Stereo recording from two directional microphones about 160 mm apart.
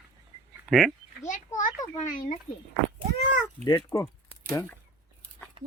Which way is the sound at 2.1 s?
50° left (ahead or behind).